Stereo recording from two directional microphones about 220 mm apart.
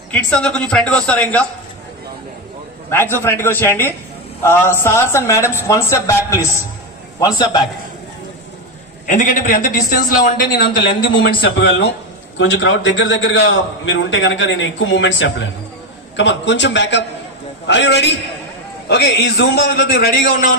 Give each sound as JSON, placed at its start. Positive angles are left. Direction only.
{"t": 0.1, "sound": "a woman's voice", "side_deg": 5}
{"t": 2.9, "sound": "a man's voice", "side_deg": 10}
{"t": 9.0, "sound": "a man's voice", "side_deg": 35}